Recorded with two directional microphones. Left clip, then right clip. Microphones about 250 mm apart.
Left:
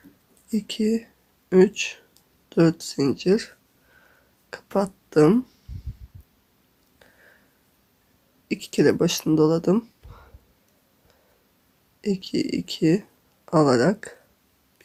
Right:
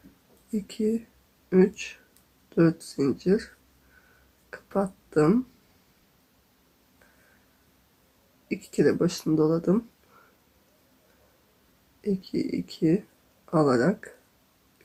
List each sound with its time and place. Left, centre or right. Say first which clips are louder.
0.5 s speech: left 3 dB; left
4.5 s a sound: left 4 dB; left
8.4 s speech: left 4 dB; left
12.0 s speech: left 3 dB; left